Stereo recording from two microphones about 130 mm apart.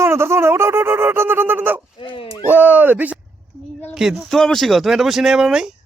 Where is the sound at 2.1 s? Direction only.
45° left (ahead or behind).